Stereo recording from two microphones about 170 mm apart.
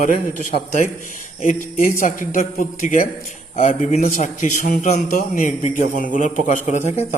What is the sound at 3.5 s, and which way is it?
A man's voice, 35° left (ahead or behind).